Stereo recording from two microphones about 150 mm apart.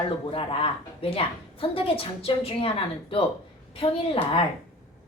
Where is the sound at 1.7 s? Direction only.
40° left (ahead or behind).